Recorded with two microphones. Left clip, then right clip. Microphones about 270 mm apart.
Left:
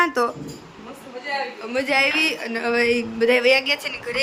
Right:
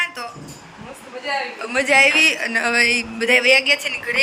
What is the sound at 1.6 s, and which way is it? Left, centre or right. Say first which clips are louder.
A man's voice: right 6 dB; centre.